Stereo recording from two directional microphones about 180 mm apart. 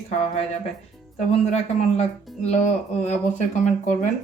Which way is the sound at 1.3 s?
35° left (ahead or behind).